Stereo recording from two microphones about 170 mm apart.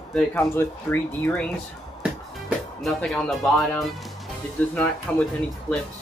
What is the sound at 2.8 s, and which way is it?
Speech, centre (ahead or behind).